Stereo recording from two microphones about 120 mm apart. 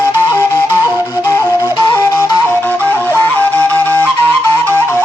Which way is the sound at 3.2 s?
15° left (ahead or behind).